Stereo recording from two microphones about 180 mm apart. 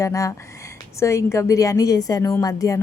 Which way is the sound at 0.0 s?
15° left (ahead or behind).